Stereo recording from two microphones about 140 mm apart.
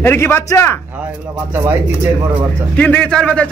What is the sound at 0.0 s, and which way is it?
Speech, 15° left (ahead or behind).